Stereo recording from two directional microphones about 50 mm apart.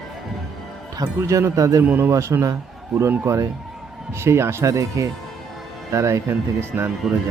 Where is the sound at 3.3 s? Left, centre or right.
Right.